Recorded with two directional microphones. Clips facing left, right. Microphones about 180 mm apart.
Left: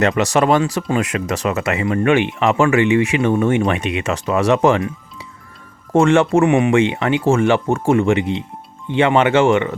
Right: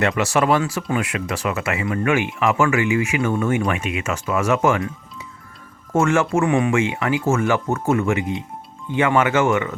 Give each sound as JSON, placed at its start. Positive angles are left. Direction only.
{"t": 0.2, "sound": "speech", "side_deg": 35}
{"t": 0.8, "sound": "speech", "side_deg": 25}
{"t": 1.0, "sound": "speech", "side_deg": 40}
{"t": 5.9, "sound": "speech", "side_deg": 30}
{"t": 6.4, "sound": "speech", "side_deg": 20}
{"t": 6.7, "sound": "speech", "side_deg": 30}